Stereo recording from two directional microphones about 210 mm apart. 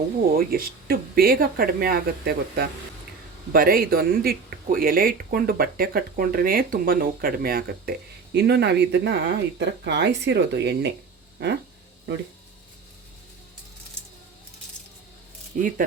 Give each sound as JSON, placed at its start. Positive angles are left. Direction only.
{"t": 0.3, "sound": "speech", "side_deg": -45}
{"t": 15.5, "sound": "speech", "side_deg": -40}